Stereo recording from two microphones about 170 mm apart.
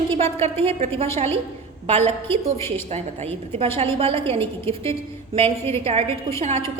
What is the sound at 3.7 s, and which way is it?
Speech, 35° right (ahead or behind).